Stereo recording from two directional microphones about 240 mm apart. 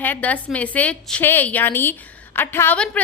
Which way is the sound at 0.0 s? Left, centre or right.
Centre.